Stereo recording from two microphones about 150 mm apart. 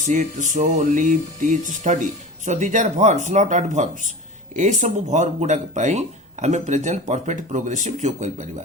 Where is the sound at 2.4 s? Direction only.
55° right (ahead or behind).